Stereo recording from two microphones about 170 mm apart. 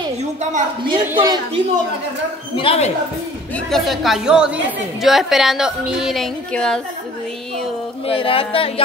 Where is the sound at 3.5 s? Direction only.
Centre (ahead or behind).